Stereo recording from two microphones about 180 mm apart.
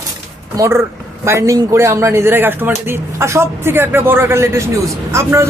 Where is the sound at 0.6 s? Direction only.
15° right (ahead or behind).